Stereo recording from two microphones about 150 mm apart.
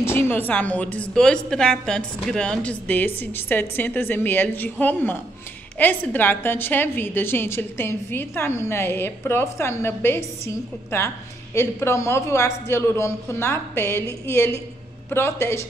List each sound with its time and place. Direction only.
0.0 s a woman's voice: 15° left (ahead or behind)